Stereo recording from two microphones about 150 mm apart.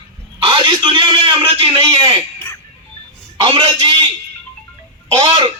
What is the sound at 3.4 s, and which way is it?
Speech, 35° right (ahead or behind).